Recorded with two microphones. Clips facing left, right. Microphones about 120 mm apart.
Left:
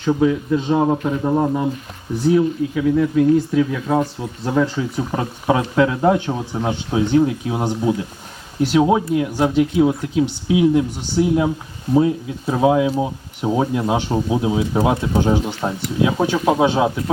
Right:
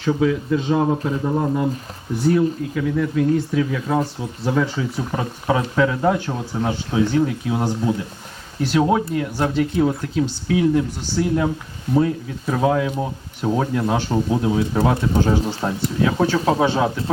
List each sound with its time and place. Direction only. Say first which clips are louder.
0.1 s speech: left 2 dB; 5° left (ahead or behind)
0.8 s a man's voice: left 2 dB; 20° left (ahead or behind)
2.2 s speech: left 2 dB; 5° left (ahead or behind)
5.1 s speech: left 2 dB; 15° left (ahead or behind)